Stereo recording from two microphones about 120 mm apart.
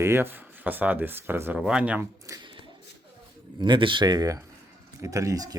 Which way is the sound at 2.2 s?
30° right (ahead or behind).